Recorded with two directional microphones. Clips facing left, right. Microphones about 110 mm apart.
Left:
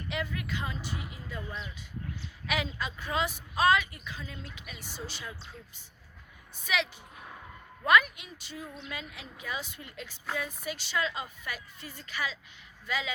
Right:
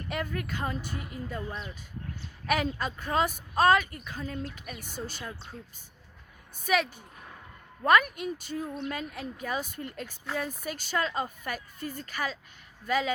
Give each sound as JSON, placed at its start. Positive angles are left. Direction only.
{"t": 0.1, "sound": "speech", "side_deg": -45}
{"t": 6.7, "sound": "speech", "side_deg": -40}
{"t": 7.9, "sound": "speech", "side_deg": -45}